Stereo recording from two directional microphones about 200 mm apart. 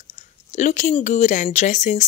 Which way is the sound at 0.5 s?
40° left (ahead or behind).